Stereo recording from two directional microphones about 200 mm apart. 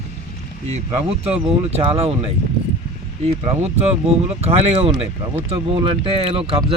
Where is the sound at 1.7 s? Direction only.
30° right (ahead or behind).